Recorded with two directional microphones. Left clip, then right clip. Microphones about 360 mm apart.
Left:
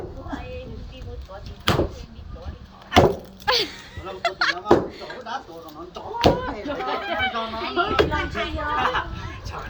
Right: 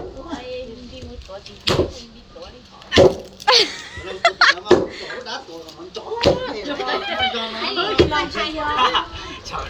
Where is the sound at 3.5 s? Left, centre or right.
Centre.